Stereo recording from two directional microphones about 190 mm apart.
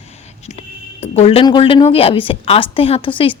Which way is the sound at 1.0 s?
30° left (ahead or behind).